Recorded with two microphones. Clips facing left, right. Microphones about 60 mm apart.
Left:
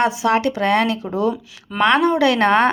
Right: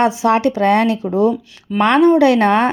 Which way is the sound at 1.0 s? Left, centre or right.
Centre.